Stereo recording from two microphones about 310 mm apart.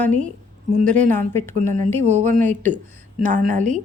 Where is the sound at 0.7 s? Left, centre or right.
Right.